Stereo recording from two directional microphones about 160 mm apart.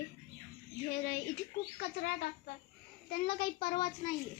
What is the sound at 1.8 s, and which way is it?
Speech, 85° left.